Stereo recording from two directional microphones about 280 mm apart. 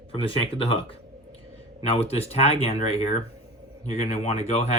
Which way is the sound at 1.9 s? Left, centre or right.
Left.